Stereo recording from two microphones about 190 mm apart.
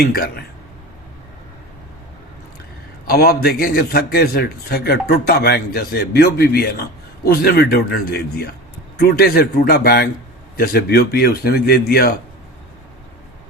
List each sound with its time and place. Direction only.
0.1 s a man's voice: 55° left (ahead or behind)
3.1 s a man's voice: 55° left (ahead or behind)